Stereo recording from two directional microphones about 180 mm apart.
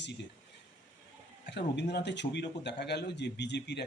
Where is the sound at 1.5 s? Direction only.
70° left (ahead or behind).